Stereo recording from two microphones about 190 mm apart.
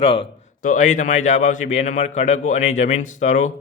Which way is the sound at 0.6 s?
40° left (ahead or behind).